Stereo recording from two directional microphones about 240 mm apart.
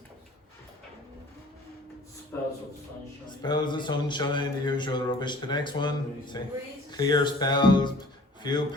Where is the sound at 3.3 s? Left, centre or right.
Centre.